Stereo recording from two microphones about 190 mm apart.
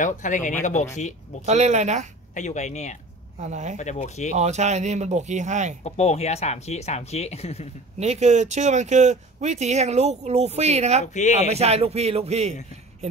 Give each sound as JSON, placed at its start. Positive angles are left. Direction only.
{"t": 0.0, "sound": "speech", "side_deg": 40}
{"t": 1.4, "sound": "speech", "side_deg": -35}
{"t": 2.3, "sound": "speech", "side_deg": 40}
{"t": 3.4, "sound": "speech", "side_deg": -40}
{"t": 3.7, "sound": "speech", "side_deg": 35}
{"t": 4.4, "sound": "speech", "side_deg": -35}
{"t": 5.9, "sound": "speech", "side_deg": 35}
{"t": 8.0, "sound": "speech", "side_deg": -35}
{"t": 11.1, "sound": "speech", "side_deg": 40}
{"t": 11.5, "sound": "speech", "side_deg": -35}